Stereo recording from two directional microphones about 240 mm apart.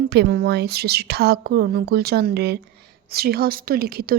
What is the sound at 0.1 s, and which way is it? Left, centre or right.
A woman's voice, right.